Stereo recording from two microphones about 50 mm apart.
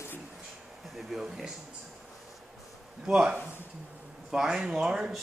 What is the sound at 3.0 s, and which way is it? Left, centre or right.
A man's voice, centre.